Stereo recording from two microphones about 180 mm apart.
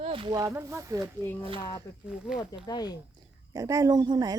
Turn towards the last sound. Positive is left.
turn(degrees=-20)  # may be behind; listen again after turning